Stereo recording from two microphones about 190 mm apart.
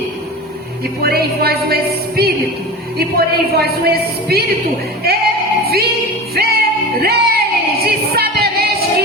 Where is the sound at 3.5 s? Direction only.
55° right (ahead or behind).